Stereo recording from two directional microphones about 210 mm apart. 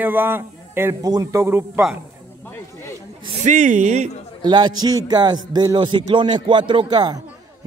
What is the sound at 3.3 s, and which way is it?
Speech, 35° right (ahead or behind).